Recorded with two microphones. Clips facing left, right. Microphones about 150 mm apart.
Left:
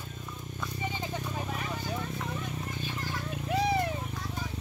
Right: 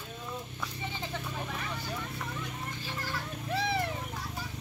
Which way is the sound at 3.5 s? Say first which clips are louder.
Left 4 dB; 15° left (ahead or behind).